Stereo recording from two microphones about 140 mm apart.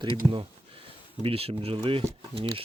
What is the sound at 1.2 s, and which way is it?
Speech, 45° right (ahead or behind).